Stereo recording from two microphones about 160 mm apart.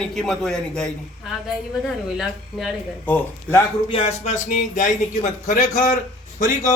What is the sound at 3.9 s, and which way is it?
Speech, 40° left (ahead or behind).